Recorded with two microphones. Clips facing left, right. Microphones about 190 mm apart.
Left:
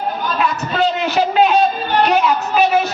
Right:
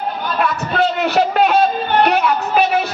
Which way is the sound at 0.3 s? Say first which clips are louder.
Right 2 dB; 55° right (ahead or behind).